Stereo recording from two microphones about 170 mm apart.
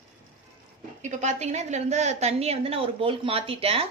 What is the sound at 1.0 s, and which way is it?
A woman's voice, 45° right (ahead or behind).